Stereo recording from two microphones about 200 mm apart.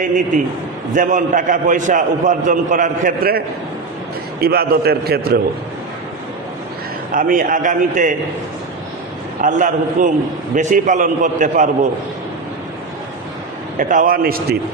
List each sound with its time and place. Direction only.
0.9 s a man's voice: 40° right (ahead or behind)
7.1 s a man's voice: 40° right (ahead or behind)
9.4 s a man's voice: 40° right (ahead or behind)
13.7 s a man's voice: 40° right (ahead or behind)